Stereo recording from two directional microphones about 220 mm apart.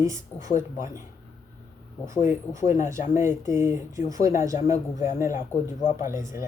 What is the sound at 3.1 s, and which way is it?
Speech, 10° right (ahead or behind).